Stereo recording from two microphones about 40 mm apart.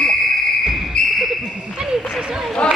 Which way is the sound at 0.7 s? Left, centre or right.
Centre.